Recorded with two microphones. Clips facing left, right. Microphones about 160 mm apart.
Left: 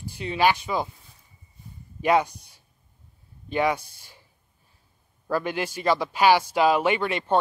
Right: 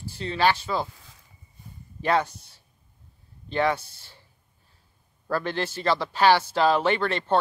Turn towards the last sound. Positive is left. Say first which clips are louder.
# even
turn(degrees=10)  # may be behind; listen again after turning